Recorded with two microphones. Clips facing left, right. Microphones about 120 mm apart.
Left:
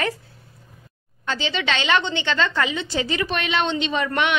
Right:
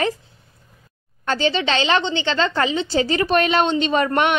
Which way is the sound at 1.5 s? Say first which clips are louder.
Even; 35° right (ahead or behind).